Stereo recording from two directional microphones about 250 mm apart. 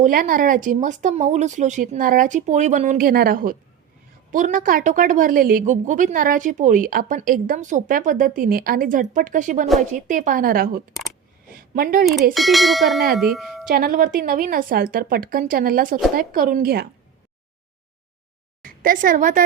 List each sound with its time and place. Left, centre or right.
0.0 s a woman's voice: right
11.4 s a sound: right
12.3 s bell: centre
13.7 s a woman's voice: right
18.8 s a woman's voice: right